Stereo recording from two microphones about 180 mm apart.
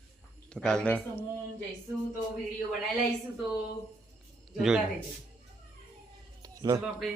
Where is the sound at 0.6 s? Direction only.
5° left (ahead or behind).